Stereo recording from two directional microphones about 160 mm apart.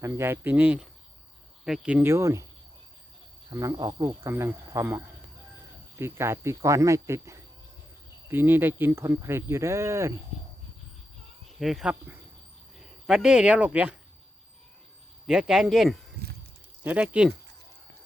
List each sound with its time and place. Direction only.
0.0 s speech: 15° right (ahead or behind)
3.5 s speech: 20° right (ahead or behind)
11.6 s speech: 5° right (ahead or behind)
15.3 s speech: 5° right (ahead or behind)